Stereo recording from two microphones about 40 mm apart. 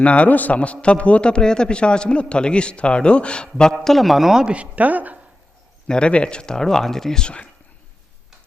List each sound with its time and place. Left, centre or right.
0.0 s a man's voice: left
3.7 s speech: centre
4.5 s a woman's voice: right
5.9 s speech: left; by 7.3 s centre